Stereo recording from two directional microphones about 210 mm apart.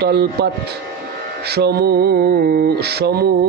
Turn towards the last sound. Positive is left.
turn(degrees=-50)  # may be behind; listen again after turning